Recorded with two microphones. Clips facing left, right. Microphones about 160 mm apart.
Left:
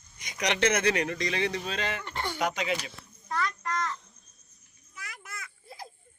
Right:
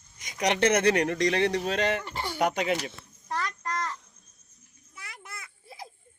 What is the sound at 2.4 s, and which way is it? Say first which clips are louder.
Speech: right 5 dB; 50° right (ahead or behind).